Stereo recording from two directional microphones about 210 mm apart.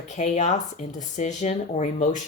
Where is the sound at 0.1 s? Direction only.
35° left (ahead or behind).